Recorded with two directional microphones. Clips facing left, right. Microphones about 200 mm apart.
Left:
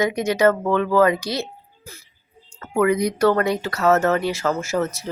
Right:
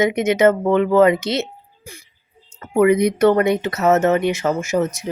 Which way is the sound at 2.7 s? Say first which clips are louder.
Right 4 dB; 20° right (ahead or behind).